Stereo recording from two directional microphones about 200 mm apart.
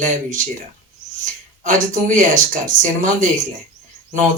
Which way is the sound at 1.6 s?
40° right (ahead or behind).